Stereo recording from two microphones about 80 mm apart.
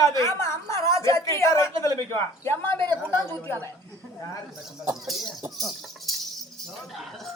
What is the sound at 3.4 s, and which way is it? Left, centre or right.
Speech, left.